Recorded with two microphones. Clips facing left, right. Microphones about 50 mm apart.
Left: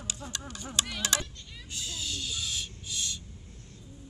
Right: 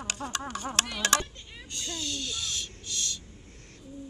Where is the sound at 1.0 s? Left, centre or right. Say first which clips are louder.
Right 8 dB; right.